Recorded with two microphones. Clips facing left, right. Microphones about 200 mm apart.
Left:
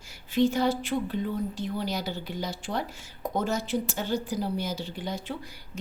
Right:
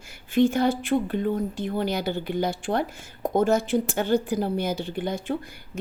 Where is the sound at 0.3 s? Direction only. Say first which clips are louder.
Right 3 dB; 55° right (ahead or behind).